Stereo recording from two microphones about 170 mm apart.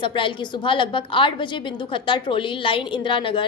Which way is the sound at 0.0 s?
30° left (ahead or behind).